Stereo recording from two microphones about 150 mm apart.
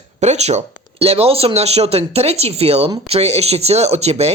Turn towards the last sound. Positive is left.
turn(degrees=-45)  # may be behind; listen again after turning